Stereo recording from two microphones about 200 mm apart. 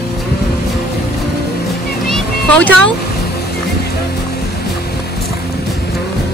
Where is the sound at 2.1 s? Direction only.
5° left (ahead or behind).